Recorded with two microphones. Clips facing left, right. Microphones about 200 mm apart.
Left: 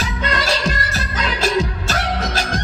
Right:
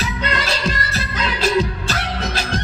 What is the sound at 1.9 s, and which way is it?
Music, 45° left (ahead or behind).